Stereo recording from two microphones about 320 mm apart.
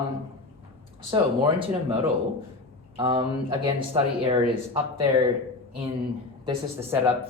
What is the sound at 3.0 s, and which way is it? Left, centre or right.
Speech, centre.